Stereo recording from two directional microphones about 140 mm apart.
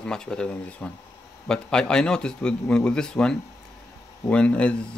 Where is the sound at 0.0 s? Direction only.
5° left (ahead or behind).